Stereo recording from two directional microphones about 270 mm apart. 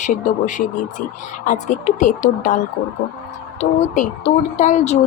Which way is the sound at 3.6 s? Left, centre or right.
Left.